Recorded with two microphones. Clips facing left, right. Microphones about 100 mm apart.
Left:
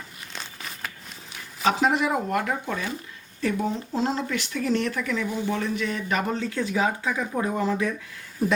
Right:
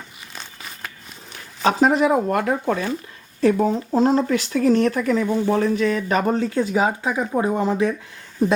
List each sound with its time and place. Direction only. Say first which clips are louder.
0.3 s crumpling: even; centre (ahead or behind)
1.6 s speech: right 5 dB; 40° right (ahead or behind)